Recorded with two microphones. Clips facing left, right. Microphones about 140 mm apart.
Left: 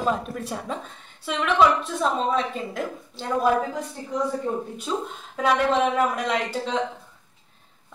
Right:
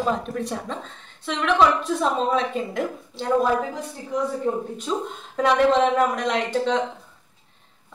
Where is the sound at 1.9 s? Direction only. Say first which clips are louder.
Right 1 dB; centre (ahead or behind).